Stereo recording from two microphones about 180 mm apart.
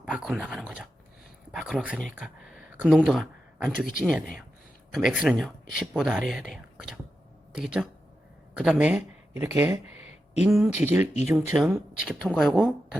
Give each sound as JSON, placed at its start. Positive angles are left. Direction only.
{"t": 0.0, "sound": "speech", "side_deg": -5}
{"t": 2.1, "sound": "a sound", "side_deg": -5}
{"t": 4.9, "sound": "speech", "side_deg": 0}
{"t": 9.8, "sound": "a sound", "side_deg": 35}
{"t": 10.5, "sound": "speech", "side_deg": -10}
{"t": 11.0, "sound": "speech", "side_deg": 40}
{"t": 11.3, "sound": "speech", "side_deg": 0}